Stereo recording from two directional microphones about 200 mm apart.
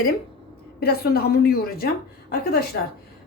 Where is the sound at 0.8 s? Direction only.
50° left (ahead or behind).